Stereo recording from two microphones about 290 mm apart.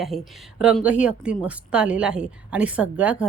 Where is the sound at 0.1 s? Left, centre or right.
Centre.